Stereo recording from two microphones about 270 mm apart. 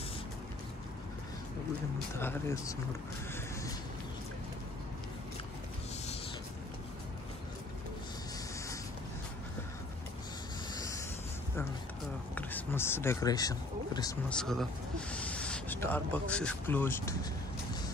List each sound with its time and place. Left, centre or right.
2.1 s speech: centre
10.7 s wind noise: centre
12.4 s speech: centre
14.3 s speech: centre